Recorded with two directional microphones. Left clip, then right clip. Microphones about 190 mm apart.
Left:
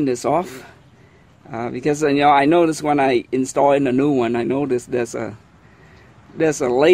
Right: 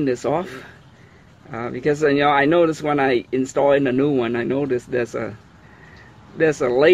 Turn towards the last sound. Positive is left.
turn(degrees=35)  # may be behind; listen again after turning